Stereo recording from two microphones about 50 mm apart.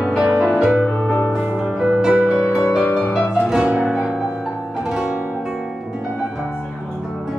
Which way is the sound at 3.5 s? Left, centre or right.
Right.